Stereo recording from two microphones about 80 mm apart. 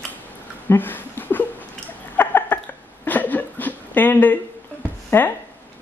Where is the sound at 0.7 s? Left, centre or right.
Left.